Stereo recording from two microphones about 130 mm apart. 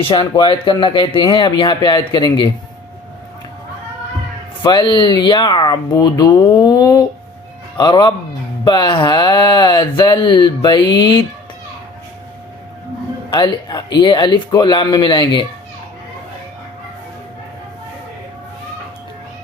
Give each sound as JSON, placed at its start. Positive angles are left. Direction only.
{"t": 0.0, "sound": "speech", "side_deg": 40}
{"t": 4.6, "sound": "speech", "side_deg": 35}
{"t": 13.3, "sound": "speech", "side_deg": 30}